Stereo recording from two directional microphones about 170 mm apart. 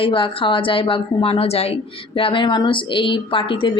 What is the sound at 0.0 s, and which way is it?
A woman's voice, 30° left (ahead or behind).